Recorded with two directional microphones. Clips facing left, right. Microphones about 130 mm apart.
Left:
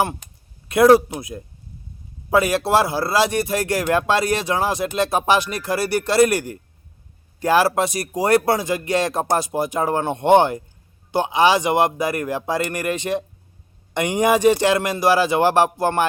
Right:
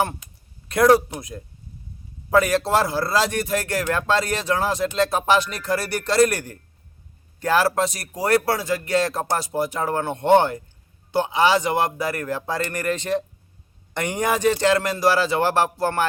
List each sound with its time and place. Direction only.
0.7 s speech: 5° left (ahead or behind)